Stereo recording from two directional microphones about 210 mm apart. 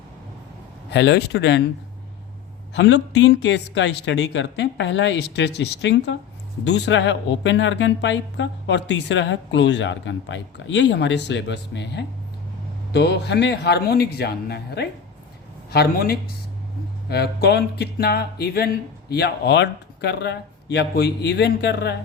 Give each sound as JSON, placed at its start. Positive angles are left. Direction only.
{"t": 0.9, "sound": "speech", "side_deg": 55}
{"t": 2.7, "sound": "a woman's voice", "side_deg": 55}